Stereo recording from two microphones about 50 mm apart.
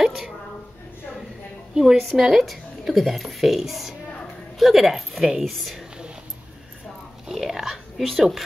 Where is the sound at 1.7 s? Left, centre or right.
Centre.